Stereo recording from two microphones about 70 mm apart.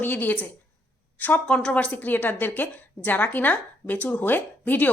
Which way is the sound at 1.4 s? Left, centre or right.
Centre.